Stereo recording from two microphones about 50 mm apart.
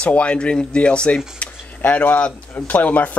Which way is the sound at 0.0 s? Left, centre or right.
Left.